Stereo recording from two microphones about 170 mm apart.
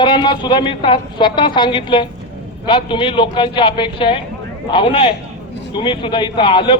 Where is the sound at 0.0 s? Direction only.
25° left (ahead or behind).